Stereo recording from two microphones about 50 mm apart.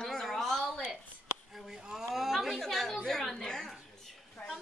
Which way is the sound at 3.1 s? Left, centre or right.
Centre.